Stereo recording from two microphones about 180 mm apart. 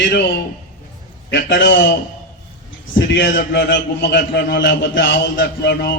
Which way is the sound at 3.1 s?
65° left (ahead or behind).